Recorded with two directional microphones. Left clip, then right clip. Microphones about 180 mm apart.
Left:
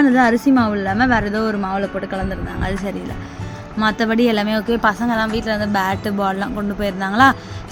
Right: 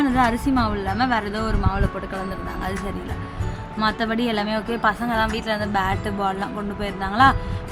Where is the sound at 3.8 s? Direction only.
20° left (ahead or behind).